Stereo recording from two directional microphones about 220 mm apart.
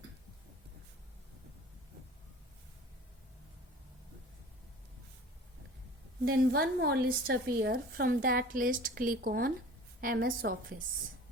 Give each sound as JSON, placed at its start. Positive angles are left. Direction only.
{"t": 6.2, "sound": "a woman's voice", "side_deg": -45}